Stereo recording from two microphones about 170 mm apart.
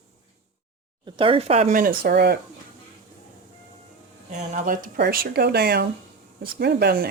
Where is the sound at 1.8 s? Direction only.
65° right (ahead or behind).